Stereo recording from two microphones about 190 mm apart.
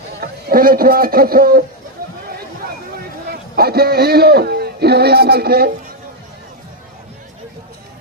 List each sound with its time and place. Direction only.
0.2 s speech: 50° right (ahead or behind)
3.2 s a man's voice: 55° right (ahead or behind)